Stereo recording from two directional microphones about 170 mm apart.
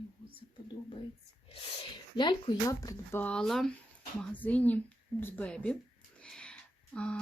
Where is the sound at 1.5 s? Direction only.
35° left (ahead or behind).